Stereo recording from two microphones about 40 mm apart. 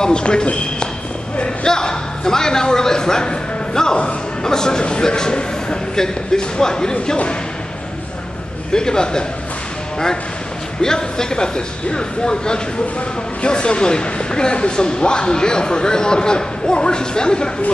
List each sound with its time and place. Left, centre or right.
0.0 s a man's voice: left
8.7 s a man's voice: centre
10.8 s speech: centre